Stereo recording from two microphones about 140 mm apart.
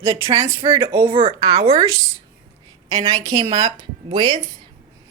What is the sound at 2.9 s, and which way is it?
A woman's voice, 35° right (ahead or behind).